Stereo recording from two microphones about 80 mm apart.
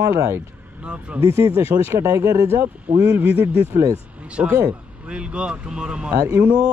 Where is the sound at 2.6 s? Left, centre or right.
Right.